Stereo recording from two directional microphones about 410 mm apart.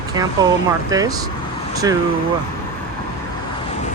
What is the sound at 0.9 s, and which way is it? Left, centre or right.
Speech, centre.